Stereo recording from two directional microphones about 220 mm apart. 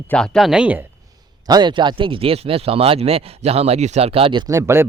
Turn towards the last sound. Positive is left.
turn(degrees=-10)  # may be behind; listen again after turning